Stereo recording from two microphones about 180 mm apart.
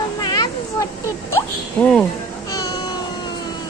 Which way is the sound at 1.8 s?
5° left (ahead or behind).